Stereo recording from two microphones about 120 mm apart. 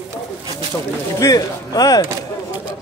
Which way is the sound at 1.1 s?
30° left (ahead or behind).